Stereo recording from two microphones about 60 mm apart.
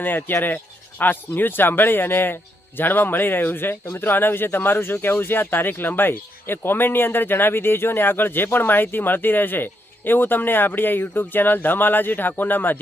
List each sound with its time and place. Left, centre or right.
0.0 s speech: left